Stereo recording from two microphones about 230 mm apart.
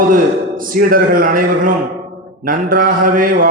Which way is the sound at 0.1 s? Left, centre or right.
Right.